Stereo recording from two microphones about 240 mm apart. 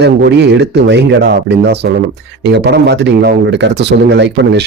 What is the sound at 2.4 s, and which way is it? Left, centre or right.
A man's voice, right.